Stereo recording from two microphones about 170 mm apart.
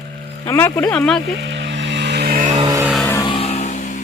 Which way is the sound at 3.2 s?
35° left (ahead or behind).